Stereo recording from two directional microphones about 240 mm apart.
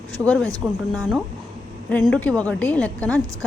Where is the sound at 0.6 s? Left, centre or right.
Centre.